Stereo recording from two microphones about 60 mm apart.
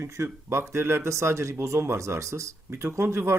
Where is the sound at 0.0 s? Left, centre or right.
Right.